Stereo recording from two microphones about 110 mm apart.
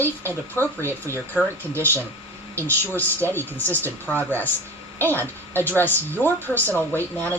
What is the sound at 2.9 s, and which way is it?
Speech, 20° left (ahead or behind).